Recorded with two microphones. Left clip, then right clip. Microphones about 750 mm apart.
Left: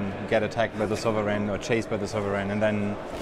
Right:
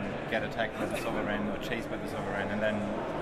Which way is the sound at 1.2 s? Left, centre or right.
Left.